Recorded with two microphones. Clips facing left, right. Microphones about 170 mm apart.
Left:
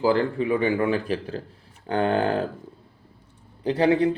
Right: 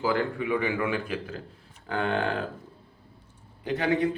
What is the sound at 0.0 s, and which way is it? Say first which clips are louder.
A man's voice: left 5 dB; 30° left (ahead or behind).